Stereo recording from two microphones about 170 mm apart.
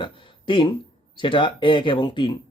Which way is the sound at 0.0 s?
30° left (ahead or behind).